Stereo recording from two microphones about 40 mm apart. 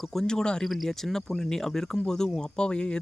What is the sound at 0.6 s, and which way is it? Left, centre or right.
Speech, centre.